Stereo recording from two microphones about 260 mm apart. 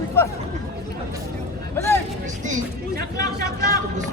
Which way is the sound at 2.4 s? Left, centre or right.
Right.